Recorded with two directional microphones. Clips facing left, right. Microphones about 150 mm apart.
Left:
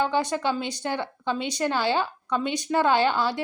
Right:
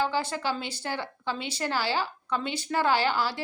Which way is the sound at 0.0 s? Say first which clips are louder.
Left 4 dB; 15° left (ahead or behind).